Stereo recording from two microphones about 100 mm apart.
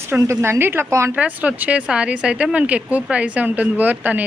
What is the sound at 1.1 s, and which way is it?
A woman's voice, 15° right (ahead or behind).